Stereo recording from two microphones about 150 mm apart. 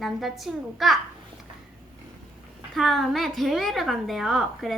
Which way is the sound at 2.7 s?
Centre (ahead or behind).